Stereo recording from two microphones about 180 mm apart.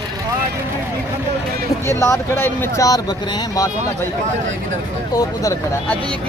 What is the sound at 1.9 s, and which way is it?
Speech, 15° left (ahead or behind).